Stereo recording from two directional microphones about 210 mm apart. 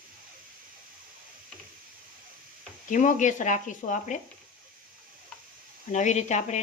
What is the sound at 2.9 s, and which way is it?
Speech, 35° left (ahead or behind).